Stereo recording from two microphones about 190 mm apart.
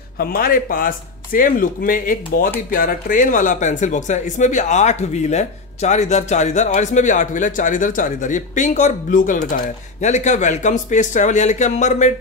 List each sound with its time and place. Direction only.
0.2 s speech: 50° left (ahead or behind)